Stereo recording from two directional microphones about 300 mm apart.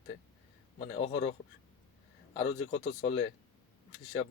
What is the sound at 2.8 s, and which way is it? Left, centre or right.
Speech, left.